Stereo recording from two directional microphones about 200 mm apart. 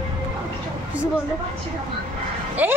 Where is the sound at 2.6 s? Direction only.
10° right (ahead or behind).